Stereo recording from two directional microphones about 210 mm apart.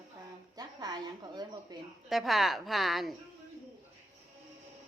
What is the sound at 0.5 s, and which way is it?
A woman's voice, 20° right (ahead or behind).